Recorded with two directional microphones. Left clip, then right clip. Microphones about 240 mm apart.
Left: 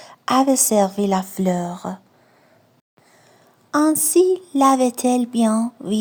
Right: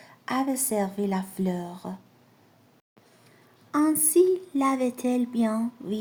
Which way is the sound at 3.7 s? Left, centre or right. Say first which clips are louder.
Left 6 dB; left.